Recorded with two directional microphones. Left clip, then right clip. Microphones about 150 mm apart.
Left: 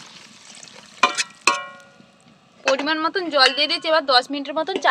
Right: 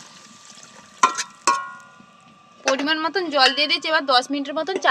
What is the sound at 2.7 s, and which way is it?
A woman's voice, 30° right (ahead or behind).